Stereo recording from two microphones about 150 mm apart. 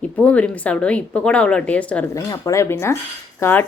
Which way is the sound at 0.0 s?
10° left (ahead or behind).